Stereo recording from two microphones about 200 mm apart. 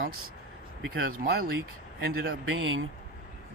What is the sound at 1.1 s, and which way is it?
Speech, 45° right (ahead or behind).